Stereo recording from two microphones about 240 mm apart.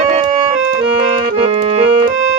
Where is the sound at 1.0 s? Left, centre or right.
Right.